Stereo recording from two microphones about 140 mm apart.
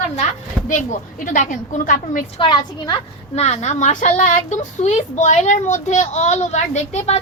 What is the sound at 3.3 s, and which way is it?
Speech, 55° left (ahead or behind).